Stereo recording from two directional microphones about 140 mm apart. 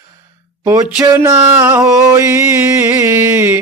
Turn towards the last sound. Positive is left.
turn(degrees=-15)  # may be behind; listen again after turning